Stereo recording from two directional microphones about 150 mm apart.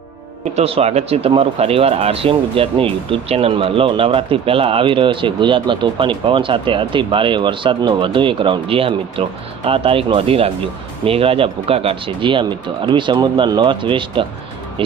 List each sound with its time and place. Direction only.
0.5 s speech: 45° right (ahead or behind)